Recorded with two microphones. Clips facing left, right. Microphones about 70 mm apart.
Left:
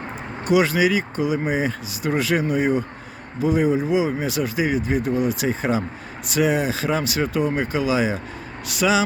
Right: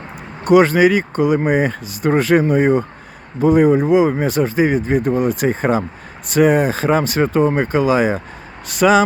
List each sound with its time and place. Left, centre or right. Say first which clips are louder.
0.4 s speech: right 7 dB; right